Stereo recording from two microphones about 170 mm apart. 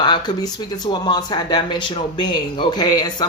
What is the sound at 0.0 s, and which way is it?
Speech, 25° left (ahead or behind).